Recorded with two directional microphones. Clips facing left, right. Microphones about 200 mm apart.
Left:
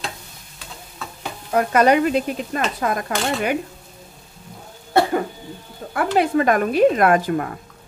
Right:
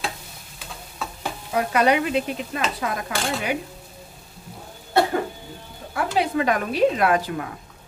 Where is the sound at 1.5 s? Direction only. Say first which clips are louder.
Left 4 dB; 45° left (ahead or behind).